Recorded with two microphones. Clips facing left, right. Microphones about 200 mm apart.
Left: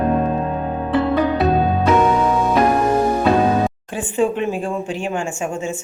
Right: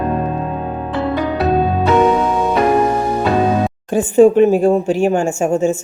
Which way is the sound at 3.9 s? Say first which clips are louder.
Right 12 dB; 40° right (ahead or behind).